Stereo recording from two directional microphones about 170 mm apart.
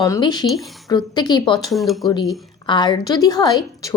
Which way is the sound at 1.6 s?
Centre (ahead or behind).